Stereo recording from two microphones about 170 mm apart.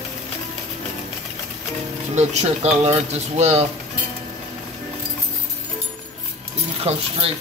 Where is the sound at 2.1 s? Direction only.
40° right (ahead or behind).